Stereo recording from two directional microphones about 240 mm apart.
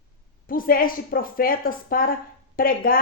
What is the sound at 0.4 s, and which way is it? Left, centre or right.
A woman's voice, left.